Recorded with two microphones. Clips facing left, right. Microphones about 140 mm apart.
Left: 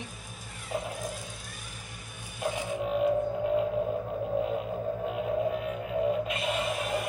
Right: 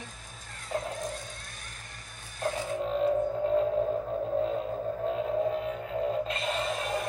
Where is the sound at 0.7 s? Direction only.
5° left (ahead or behind).